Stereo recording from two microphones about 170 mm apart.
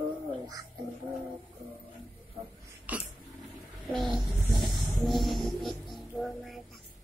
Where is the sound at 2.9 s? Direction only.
10° right (ahead or behind).